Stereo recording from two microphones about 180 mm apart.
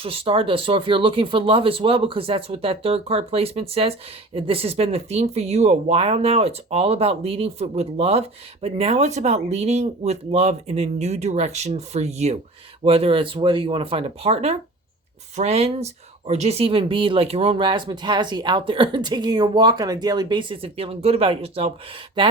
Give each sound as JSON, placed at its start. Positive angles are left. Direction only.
{"t": 0.0, "sound": "speech", "side_deg": -30}